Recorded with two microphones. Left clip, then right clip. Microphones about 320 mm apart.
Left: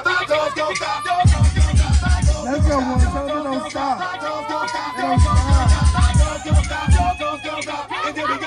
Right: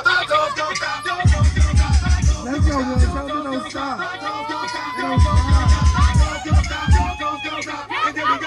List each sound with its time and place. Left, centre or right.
0.0 s music: centre
2.5 s music: centre
5.0 s music: centre